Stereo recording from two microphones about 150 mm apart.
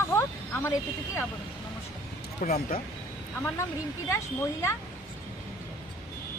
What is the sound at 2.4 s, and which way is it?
Speech, 55° left (ahead or behind).